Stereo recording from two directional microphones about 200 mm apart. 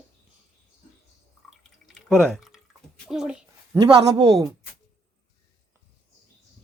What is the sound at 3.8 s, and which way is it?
Speech, 25° right (ahead or behind).